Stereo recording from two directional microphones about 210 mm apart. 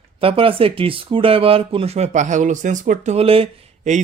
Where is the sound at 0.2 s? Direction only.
25° right (ahead or behind).